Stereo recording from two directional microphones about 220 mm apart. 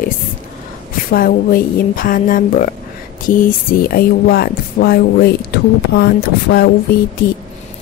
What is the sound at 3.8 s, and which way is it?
Speech, 45° left (ahead or behind).